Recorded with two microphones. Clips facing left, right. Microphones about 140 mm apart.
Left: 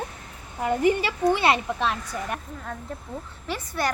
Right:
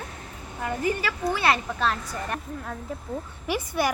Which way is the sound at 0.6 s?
25° left (ahead or behind).